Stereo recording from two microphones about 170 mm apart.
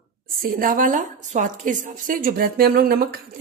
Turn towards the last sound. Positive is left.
turn(degrees=-60)  # may be behind; listen again after turning